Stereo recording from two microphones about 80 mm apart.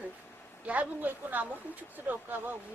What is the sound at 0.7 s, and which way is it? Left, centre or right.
A woman's voice, centre.